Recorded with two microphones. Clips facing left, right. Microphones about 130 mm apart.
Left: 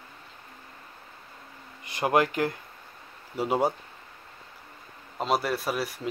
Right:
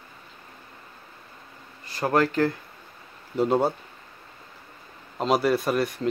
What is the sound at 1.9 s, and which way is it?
Speech, 15° left (ahead or behind).